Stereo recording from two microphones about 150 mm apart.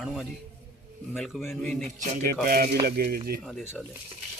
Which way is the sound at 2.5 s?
85° right.